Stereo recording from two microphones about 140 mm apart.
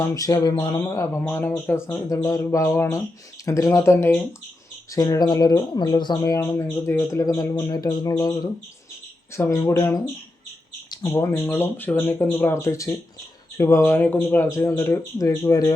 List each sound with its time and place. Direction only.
0.0 s speech: 25° left (ahead or behind)
4.9 s speech: 30° left (ahead or behind)
11.1 s speech: 20° left (ahead or behind)